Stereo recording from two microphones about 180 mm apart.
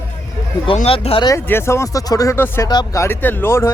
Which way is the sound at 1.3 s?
15° left (ahead or behind).